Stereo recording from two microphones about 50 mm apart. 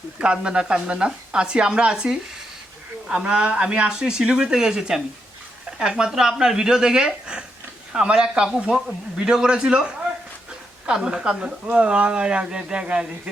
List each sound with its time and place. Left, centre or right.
0.2 s speech: right